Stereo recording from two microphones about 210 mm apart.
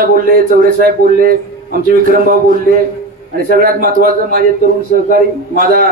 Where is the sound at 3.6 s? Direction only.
45° right (ahead or behind).